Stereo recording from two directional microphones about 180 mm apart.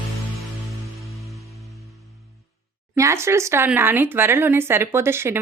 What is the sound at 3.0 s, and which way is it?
Speech, 15° right (ahead or behind).